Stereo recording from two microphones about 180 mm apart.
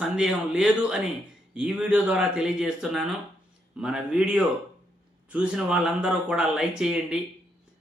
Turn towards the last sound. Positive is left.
turn(degrees=-5)  # may be behind; listen again after turning